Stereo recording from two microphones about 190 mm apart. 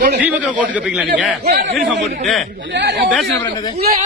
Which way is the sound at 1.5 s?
55° right (ahead or behind).